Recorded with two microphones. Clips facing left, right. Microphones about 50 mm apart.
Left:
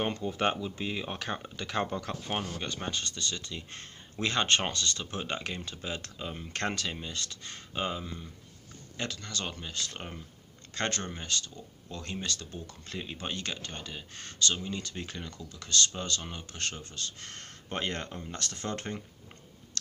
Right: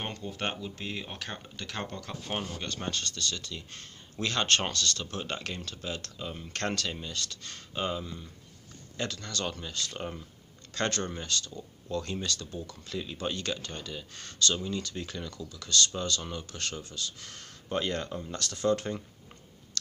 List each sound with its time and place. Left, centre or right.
0.0 s speech: centre; by 6.1 s left
6.1 s speech: centre; by 18.9 s left